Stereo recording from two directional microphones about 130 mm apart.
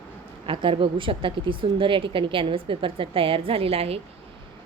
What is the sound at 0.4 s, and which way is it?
A woman's voice, 40° right (ahead or behind).